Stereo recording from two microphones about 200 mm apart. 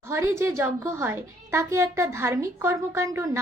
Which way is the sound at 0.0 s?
10° right (ahead or behind).